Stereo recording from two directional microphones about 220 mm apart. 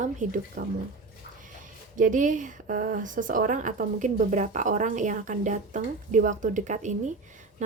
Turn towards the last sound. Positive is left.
turn(degrees=-35)  # may be behind; listen again after turning